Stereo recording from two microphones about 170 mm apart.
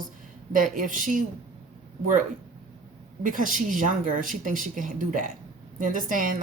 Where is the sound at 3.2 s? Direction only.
50° right (ahead or behind).